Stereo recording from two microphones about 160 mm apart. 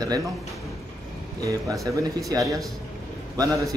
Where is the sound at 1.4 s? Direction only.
20° right (ahead or behind).